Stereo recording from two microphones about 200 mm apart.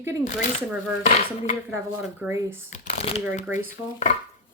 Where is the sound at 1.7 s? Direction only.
15° right (ahead or behind).